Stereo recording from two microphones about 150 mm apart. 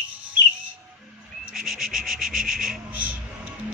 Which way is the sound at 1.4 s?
Centre (ahead or behind).